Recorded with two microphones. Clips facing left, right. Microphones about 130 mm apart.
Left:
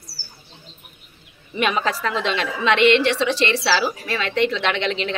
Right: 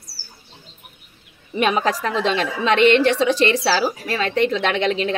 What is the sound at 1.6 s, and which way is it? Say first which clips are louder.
A woman's voice: right 2 dB; 40° right (ahead or behind).